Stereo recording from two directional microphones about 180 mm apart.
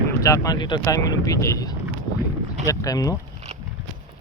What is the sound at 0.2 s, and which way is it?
Speech, 20° left (ahead or behind).